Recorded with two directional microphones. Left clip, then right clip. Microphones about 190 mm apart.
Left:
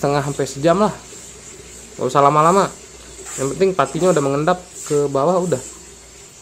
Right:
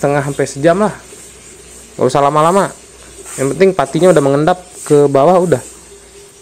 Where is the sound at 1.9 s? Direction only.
30° right (ahead or behind).